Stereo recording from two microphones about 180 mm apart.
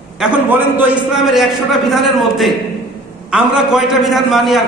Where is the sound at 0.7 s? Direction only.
5° right (ahead or behind).